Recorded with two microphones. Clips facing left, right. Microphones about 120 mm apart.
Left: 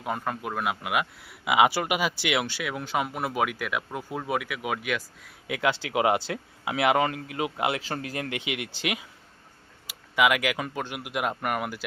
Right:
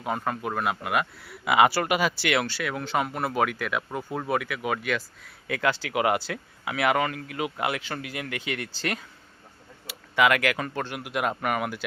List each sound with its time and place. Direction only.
0.0 s speech: centre (ahead or behind); by 7.8 s 25° left (ahead or behind)
7.8 s speech: 35° left (ahead or behind)
8.3 s speech: 20° left (ahead or behind)